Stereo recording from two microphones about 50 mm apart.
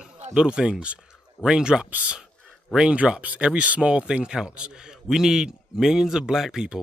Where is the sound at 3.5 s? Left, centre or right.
Centre.